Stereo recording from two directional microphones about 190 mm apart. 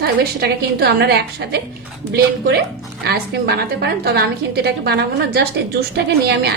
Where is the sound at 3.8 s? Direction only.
60° right (ahead or behind).